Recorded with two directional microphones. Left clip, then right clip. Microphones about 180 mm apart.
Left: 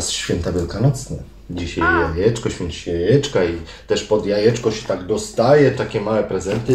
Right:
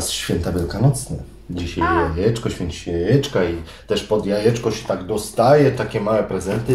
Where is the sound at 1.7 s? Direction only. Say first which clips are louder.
Left 2 dB; 15° right (ahead or behind).